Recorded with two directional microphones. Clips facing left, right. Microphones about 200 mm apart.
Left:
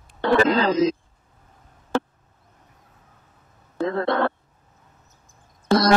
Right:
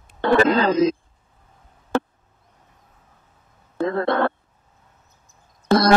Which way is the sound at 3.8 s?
55° right (ahead or behind).